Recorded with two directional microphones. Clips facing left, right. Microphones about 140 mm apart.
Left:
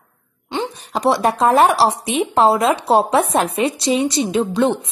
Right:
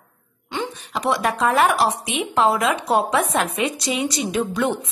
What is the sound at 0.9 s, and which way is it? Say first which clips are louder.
Speech: left 5 dB; 35° left (ahead or behind).